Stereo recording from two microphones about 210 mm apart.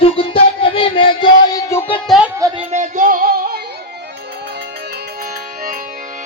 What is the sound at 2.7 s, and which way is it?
Music, 35° right (ahead or behind).